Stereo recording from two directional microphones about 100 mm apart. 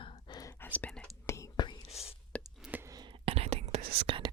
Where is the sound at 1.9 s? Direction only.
90° left.